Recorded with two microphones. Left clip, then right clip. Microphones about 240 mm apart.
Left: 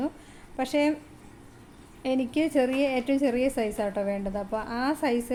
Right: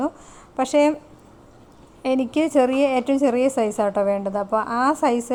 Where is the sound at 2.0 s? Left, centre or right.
Centre.